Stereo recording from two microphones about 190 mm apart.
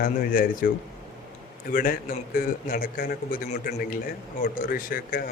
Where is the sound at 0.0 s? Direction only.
45° left (ahead or behind).